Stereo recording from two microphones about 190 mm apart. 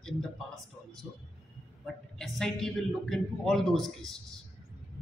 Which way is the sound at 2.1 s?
Centre (ahead or behind).